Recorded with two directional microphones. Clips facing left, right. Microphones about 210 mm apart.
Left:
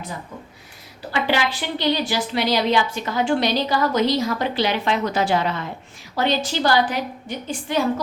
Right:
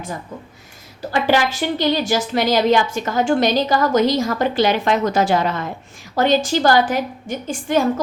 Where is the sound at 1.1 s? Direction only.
45° right (ahead or behind).